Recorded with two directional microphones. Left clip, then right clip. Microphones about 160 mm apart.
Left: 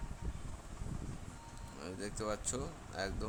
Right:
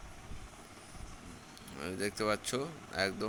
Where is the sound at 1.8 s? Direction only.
15° right (ahead or behind).